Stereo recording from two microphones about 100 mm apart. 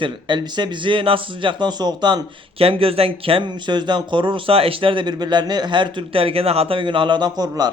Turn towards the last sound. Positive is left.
turn(degrees=-40)  # may be behind; listen again after turning